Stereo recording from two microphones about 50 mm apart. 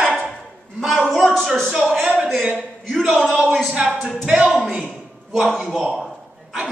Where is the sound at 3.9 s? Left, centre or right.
Centre.